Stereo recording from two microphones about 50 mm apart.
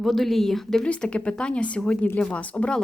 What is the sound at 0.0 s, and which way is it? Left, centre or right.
Speech, centre.